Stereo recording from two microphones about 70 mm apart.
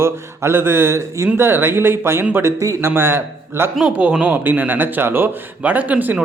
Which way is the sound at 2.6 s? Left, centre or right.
Right.